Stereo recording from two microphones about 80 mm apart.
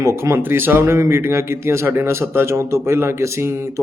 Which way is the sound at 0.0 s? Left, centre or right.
Right.